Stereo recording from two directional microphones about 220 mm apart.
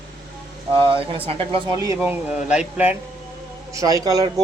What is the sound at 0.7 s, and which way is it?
Speech, 25° right (ahead or behind).